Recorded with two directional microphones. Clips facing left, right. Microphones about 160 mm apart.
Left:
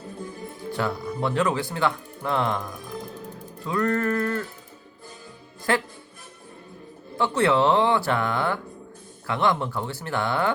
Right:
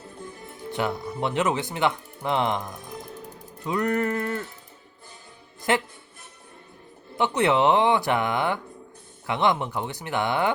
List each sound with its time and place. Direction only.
0.7 s speech: 20° right (ahead or behind)
5.7 s speech: 20° right (ahead or behind)
7.2 s speech: 20° right (ahead or behind)